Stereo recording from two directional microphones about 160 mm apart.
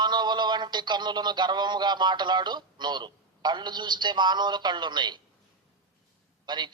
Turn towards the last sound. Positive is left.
turn(degrees=-25)  # may be behind; listen again after turning